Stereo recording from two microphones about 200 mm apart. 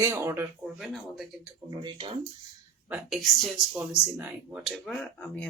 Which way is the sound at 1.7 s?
25° right (ahead or behind).